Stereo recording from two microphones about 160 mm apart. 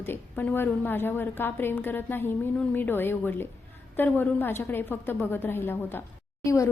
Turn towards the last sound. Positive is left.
turn(degrees=20)  # may be behind; listen again after turning